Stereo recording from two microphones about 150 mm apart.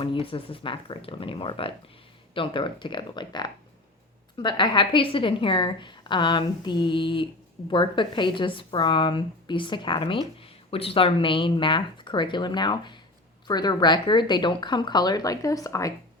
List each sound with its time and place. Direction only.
0.0 s a woman's voice: 35° left (ahead or behind)